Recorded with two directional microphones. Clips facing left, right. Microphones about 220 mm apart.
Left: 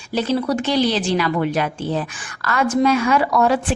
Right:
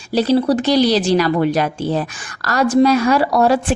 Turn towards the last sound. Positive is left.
turn(degrees=-35)  # may be behind; listen again after turning